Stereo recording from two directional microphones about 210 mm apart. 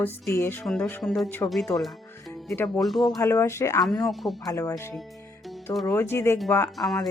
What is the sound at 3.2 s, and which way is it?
Speech, 10° left (ahead or behind).